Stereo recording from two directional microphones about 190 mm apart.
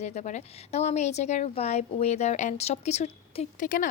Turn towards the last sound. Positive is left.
turn(degrees=45)  # may be behind; listen again after turning